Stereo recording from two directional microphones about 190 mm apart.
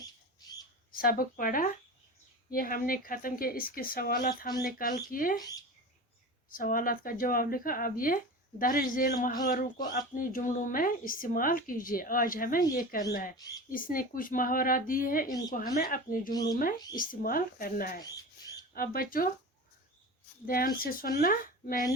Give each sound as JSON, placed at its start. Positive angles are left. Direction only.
{"t": 0.9, "sound": "speech", "side_deg": 50}
{"t": 5.4, "sound": "speech", "side_deg": 20}
{"t": 6.5, "sound": "speech", "side_deg": 50}
{"t": 15.3, "sound": "speech", "side_deg": 20}
{"t": 15.5, "sound": "speech", "side_deg": 50}
{"t": 16.3, "sound": "speech", "side_deg": 20}
{"t": 16.9, "sound": "speech", "side_deg": 45}
{"t": 20.5, "sound": "speech", "side_deg": 50}